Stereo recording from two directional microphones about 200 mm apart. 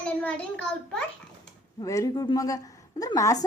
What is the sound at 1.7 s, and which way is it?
A woman's voice, 15° left (ahead or behind).